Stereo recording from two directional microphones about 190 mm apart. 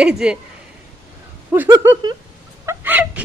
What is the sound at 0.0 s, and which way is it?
Speech, 5° right (ahead or behind).